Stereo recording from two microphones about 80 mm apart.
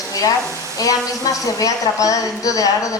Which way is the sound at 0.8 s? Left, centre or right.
Left.